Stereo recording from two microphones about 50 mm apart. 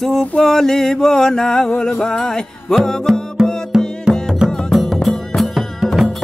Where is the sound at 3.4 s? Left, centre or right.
Centre.